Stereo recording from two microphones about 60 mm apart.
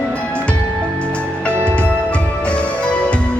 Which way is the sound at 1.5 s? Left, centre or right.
Right.